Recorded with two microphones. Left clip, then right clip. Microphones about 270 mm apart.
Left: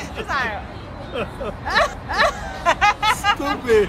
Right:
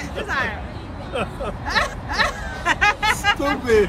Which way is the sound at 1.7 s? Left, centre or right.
Left.